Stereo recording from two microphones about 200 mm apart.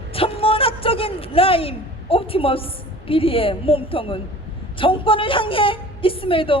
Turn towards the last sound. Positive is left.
turn(degrees=25)  # may be behind; listen again after turning